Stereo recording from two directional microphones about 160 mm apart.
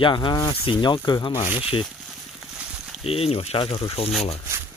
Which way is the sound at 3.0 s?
40° left (ahead or behind).